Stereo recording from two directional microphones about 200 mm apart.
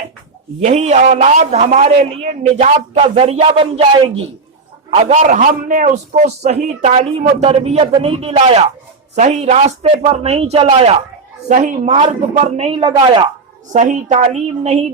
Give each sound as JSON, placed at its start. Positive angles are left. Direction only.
{"t": 0.6, "sound": "a man's voice", "side_deg": -35}